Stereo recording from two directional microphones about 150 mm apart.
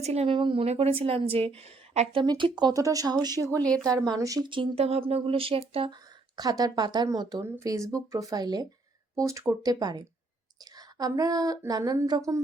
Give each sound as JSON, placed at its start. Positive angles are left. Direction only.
{"t": 0.0, "sound": "a woman's voice", "side_deg": -45}
{"t": 2.2, "sound": "speech", "side_deg": -30}
{"t": 3.5, "sound": "speech", "side_deg": 10}
{"t": 3.8, "sound": "a woman's voice", "side_deg": -25}
{"t": 6.3, "sound": "speech", "side_deg": -25}